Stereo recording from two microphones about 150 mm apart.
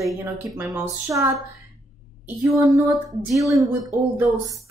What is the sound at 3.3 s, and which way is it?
Speech, 20° right (ahead or behind).